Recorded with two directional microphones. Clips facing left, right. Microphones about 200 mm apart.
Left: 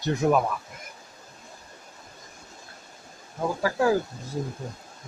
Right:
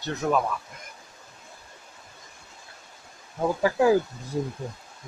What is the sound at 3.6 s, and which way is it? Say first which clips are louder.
Speech: right 3 dB; 15° right (ahead or behind).